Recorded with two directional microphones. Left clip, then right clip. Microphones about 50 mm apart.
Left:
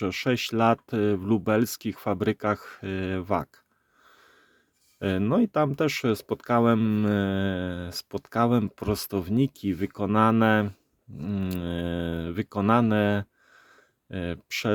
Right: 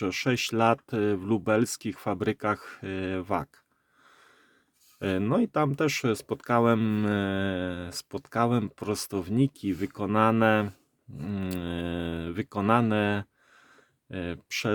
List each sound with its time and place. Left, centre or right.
0.0 s speech: left
4.0 s a sound: left
4.9 s speech: left
6.7 s mantra: centre
7.0 s speech: left
11.2 s cattle: centre
11.4 s speech: left
12.9 s a sound: left